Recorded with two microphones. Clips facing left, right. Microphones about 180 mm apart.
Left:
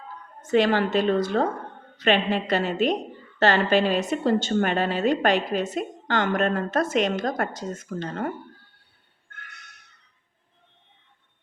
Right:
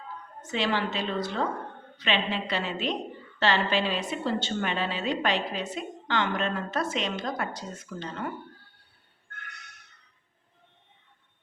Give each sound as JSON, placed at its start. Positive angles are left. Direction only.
{"t": 0.4, "sound": "a woman's voice", "side_deg": 50}